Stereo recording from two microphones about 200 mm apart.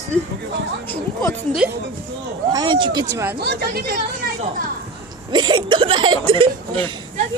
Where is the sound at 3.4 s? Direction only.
55° right (ahead or behind).